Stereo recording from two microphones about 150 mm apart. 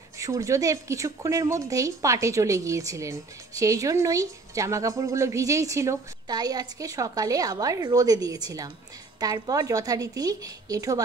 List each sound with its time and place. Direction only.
0.2 s speech: 20° right (ahead or behind)